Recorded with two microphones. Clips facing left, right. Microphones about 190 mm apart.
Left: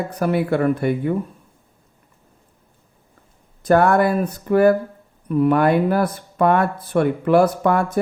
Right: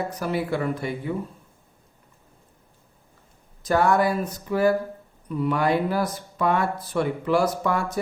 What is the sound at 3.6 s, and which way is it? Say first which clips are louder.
Speech: left 5 dB; 55° left (ahead or behind).